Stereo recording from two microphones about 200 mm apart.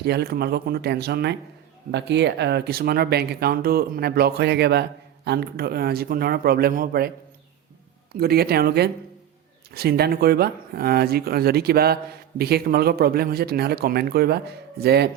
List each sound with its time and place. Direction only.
0.0 s speech: 55° right (ahead or behind)
8.1 s speech: 50° right (ahead or behind)